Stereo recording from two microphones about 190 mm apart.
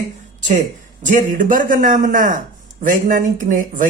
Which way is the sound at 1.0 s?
40° right (ahead or behind).